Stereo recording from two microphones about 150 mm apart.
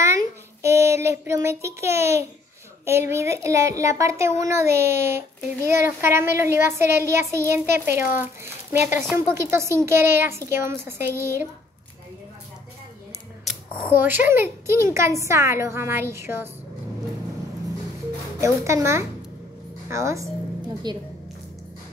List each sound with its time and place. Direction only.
0.0 s a sound: 20° right (ahead or behind)
2.8 s a woman's voice: 15° right (ahead or behind)
13.8 s a woman's voice: 15° right (ahead or behind)
18.4 s a woman's voice: 20° right (ahead or behind)